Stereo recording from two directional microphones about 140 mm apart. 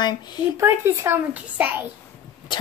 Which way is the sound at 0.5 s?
20° right (ahead or behind).